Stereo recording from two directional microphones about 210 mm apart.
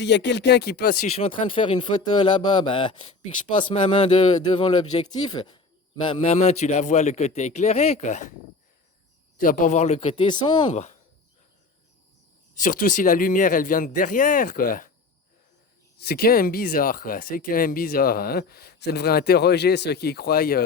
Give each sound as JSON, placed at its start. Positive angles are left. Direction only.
{"t": 0.0, "sound": "speech", "side_deg": 55}
{"t": 1.2, "sound": "a man's voice", "side_deg": 25}
{"t": 9.4, "sound": "a man's voice", "side_deg": 40}
{"t": 12.5, "sound": "a man's voice", "side_deg": 40}
{"t": 16.0, "sound": "speech", "side_deg": 50}